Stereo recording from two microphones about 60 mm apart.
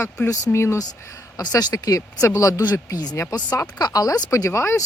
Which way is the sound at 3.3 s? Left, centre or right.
Left.